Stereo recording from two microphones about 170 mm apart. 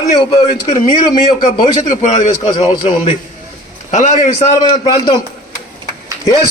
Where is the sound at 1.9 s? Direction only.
45° left (ahead or behind).